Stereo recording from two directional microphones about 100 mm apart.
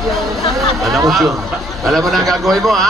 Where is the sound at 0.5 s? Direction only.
Centre (ahead or behind).